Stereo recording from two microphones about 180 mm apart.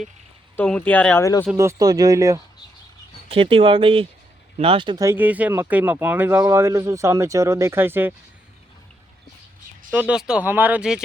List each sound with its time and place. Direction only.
0.5 s speech: 10° left (ahead or behind)
1.5 s speech: 20° right (ahead or behind)
3.2 s speech: 30° right (ahead or behind)
5.0 s speech: 10° right (ahead or behind)
9.9 s speech: 5° right (ahead or behind)